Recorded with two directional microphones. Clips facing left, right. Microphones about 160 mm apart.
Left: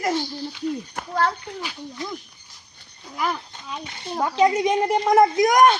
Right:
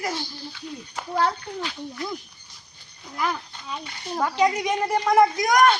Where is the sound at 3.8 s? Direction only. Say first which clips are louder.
Left 1 dB; 20° left (ahead or behind).